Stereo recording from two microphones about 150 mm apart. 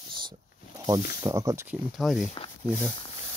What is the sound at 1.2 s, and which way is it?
Speech, 20° right (ahead or behind).